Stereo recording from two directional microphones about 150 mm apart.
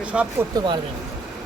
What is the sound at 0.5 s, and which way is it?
Speech, 30° right (ahead or behind).